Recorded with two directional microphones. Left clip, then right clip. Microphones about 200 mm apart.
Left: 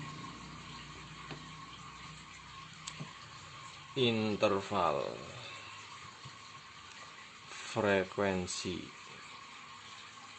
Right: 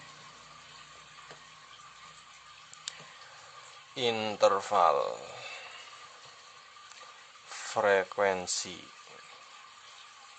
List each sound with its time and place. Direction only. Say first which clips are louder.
3.9 s speech: right 2 dB; 35° right (ahead or behind)
7.7 s speech: right 5 dB; 30° right (ahead or behind)